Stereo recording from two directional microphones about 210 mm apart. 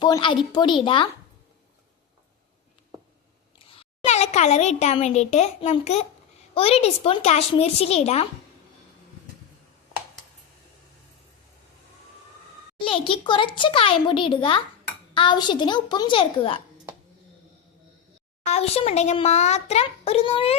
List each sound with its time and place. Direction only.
0.0 s a child's voice: 20° left (ahead or behind)
3.7 s a child's voice: 30° left (ahead or behind)
12.8 s a child's voice: 25° left (ahead or behind)
18.4 s a child's voice: 30° left (ahead or behind)